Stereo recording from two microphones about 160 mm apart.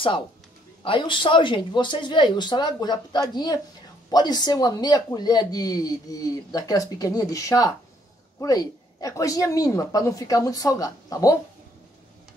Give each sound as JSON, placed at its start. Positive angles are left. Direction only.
{"t": 0.8, "sound": "speech", "side_deg": 30}